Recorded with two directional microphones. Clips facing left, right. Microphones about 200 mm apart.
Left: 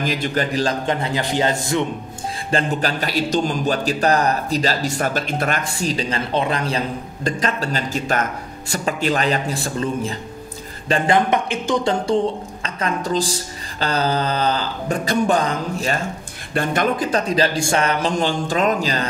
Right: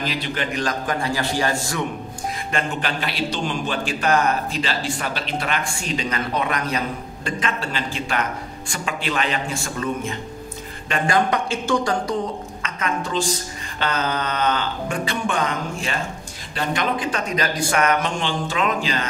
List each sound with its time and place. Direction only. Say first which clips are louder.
0.0 s a man's voice: left 4 dB; 45° left (ahead or behind); by 1.9 s 20° left (ahead or behind)
2.5 s a man's voice: left 6 dB; 40° left (ahead or behind)
10.9 s a man's voice: left 3 dB; 25° left (ahead or behind); by 19.0 s 40° left (ahead or behind)